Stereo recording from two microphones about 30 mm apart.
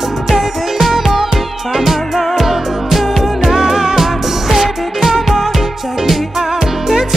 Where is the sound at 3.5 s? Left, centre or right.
Centre.